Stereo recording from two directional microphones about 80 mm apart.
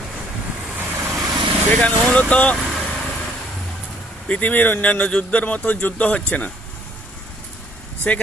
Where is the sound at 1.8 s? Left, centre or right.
Centre.